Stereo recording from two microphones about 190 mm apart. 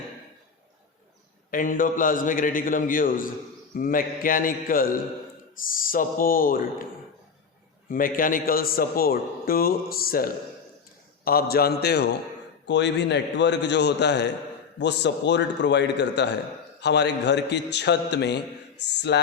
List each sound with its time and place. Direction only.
1.5 s a man's voice: 45° left (ahead or behind)
7.9 s a man's voice: 45° left (ahead or behind); by 19.2 s 65° left (ahead or behind)